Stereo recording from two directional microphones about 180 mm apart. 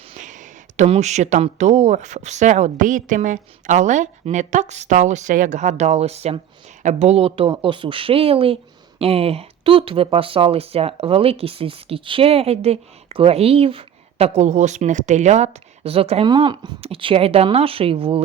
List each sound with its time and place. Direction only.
0.1 s speech: 45° right (ahead or behind)